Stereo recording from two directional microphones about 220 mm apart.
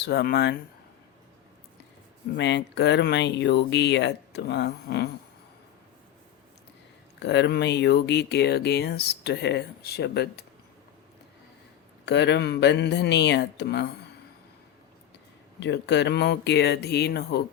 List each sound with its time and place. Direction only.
0.0 s speech: 45° left (ahead or behind)
2.3 s speech: 50° left (ahead or behind)
7.2 s speech: 50° left (ahead or behind)
12.0 s speech: 50° left (ahead or behind)
15.6 s speech: 50° left (ahead or behind)